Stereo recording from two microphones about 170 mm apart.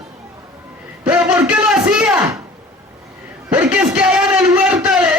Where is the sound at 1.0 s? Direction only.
5° right (ahead or behind).